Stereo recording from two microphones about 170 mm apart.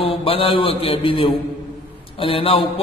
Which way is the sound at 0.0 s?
35° left (ahead or behind).